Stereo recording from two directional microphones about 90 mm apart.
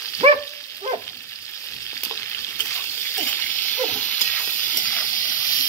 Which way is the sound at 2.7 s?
25° left (ahead or behind).